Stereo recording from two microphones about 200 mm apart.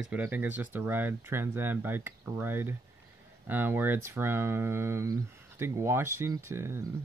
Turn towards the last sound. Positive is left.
turn(degrees=-10)  # may be behind; listen again after turning